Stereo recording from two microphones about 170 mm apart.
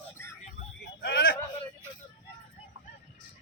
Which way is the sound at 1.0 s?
80° left.